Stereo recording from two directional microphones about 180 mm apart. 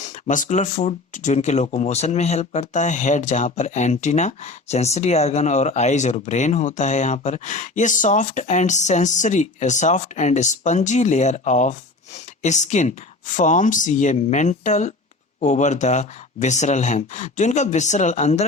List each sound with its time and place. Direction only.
0.0 s speech: 45° left (ahead or behind)